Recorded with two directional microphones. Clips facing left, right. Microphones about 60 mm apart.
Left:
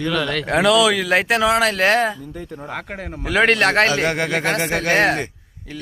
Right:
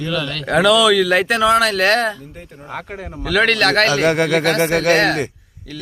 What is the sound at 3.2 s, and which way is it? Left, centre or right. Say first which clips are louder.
Speech: even; left.